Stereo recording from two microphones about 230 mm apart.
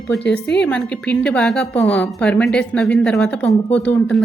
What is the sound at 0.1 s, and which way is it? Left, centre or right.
A woman's voice, centre.